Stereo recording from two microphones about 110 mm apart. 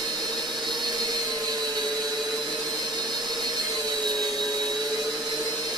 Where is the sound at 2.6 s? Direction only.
40° right (ahead or behind).